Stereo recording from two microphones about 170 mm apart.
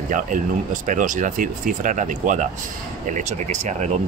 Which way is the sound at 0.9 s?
50° right (ahead or behind).